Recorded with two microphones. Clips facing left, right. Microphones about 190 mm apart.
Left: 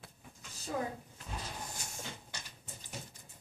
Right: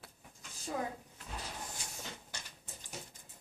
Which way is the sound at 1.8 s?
45° left (ahead or behind).